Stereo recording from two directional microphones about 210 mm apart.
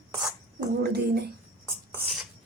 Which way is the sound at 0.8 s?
50° right (ahead or behind).